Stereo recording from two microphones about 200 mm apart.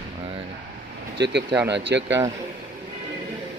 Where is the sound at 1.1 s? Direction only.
60° right (ahead or behind).